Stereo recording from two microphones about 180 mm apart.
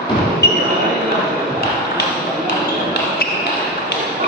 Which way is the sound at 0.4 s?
65° left (ahead or behind).